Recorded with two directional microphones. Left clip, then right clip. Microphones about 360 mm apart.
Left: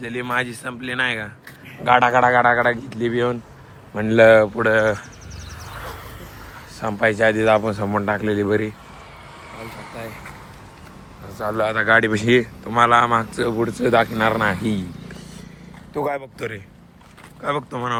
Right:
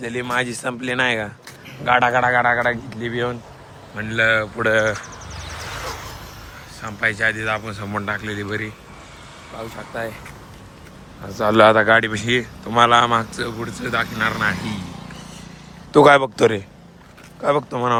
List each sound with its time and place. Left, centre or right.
0.0 s speech: centre
5.6 s a sound: right
6.8 s speech: centre
11.3 s speech: right
11.8 s speech: centre
16.0 s speech: right
17.4 s speech: centre